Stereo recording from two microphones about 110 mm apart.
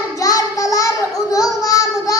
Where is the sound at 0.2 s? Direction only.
30° left (ahead or behind).